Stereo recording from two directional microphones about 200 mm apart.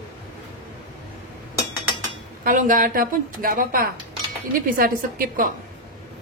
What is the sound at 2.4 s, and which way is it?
A woman's voice, 40° right (ahead or behind).